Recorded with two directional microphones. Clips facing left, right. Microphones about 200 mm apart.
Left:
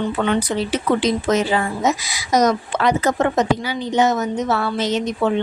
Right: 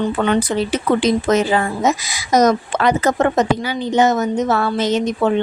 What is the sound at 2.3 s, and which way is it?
A woman's voice, 50° right (ahead or behind).